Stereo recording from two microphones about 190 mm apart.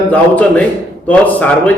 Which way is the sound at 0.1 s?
5° left (ahead or behind).